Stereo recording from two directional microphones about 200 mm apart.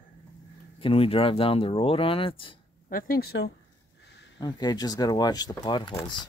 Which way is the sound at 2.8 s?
45° left (ahead or behind).